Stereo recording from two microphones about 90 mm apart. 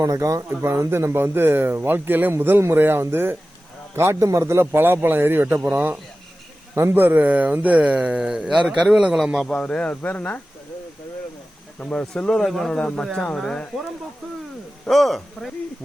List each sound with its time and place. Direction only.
0.0 s speech: 40° right (ahead or behind); by 9.5 s 5° right (ahead or behind)
9.5 s speech: 10° left (ahead or behind)
11.8 s speech: 10° left (ahead or behind)
14.8 s speech: centre (ahead or behind)